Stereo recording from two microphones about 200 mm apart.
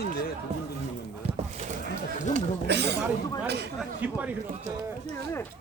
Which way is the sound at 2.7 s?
55° right (ahead or behind).